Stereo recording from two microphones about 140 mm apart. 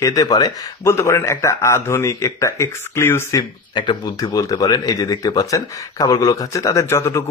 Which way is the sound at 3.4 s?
30° left (ahead or behind).